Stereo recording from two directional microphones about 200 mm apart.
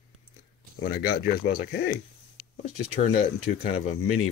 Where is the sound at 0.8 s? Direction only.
55° left (ahead or behind).